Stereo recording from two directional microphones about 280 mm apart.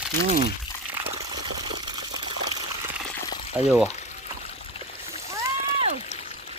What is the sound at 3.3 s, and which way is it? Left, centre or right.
Pour, centre.